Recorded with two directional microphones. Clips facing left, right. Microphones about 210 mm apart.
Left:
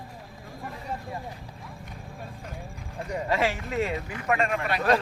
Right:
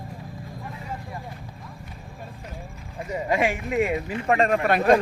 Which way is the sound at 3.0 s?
10° right (ahead or behind).